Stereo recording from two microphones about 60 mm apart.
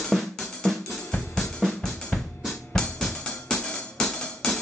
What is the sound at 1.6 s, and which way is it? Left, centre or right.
Drum, centre.